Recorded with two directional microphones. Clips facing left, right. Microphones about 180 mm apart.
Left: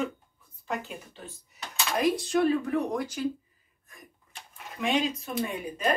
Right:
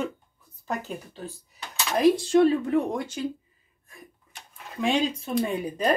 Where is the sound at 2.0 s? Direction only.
30° right (ahead or behind).